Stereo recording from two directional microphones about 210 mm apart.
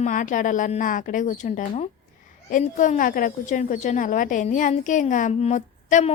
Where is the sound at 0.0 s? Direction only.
40° left (ahead or behind).